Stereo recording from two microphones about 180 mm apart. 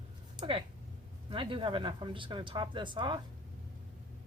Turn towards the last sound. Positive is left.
turn(degrees=-25)  # may be behind; listen again after turning